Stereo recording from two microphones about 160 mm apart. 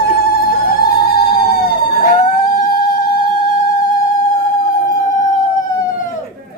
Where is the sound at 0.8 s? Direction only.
70° left (ahead or behind).